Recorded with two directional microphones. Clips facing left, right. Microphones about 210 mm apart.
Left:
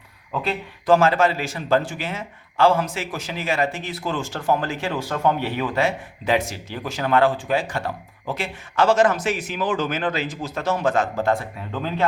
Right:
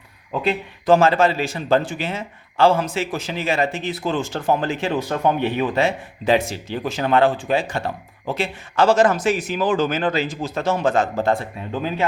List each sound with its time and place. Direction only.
0.4 s a man's voice: 25° right (ahead or behind)
11.7 s speech: 15° right (ahead or behind)